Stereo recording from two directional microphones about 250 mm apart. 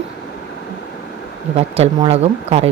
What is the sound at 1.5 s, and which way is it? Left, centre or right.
Speech, right.